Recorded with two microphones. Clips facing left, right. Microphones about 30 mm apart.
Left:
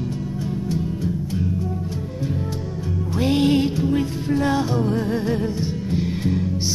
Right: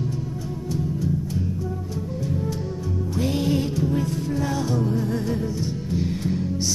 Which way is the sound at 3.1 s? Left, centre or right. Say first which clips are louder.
Left 6 dB; left.